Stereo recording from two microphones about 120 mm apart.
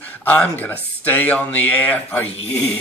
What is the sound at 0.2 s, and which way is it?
Speech, 15° left (ahead or behind).